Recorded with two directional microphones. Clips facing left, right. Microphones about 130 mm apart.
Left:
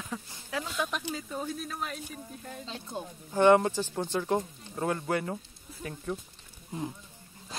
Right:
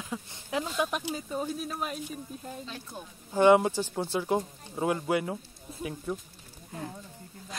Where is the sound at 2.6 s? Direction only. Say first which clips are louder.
Left 3 dB; 25° left (ahead or behind).